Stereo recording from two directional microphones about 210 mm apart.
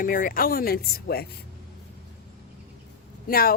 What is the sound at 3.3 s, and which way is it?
Speech, 45° left (ahead or behind).